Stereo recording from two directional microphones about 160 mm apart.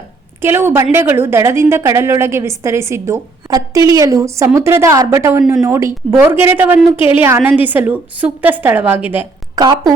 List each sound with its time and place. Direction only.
0.4 s a woman's voice: 15° right (ahead or behind)
9.6 s a woman's voice: 25° right (ahead or behind)